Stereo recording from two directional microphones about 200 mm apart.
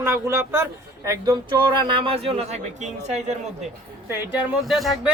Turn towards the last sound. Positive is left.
turn(degrees=0)  # may be behind; listen again after turning